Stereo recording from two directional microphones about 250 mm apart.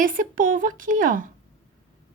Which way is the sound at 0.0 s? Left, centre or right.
Right.